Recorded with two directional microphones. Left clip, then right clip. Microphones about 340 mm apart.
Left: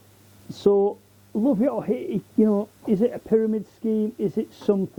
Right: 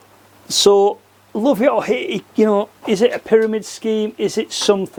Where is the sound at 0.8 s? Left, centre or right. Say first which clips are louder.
Right 8 dB; right.